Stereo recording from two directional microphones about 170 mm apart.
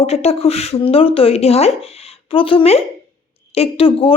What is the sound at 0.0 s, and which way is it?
A woman's voice, 35° left (ahead or behind).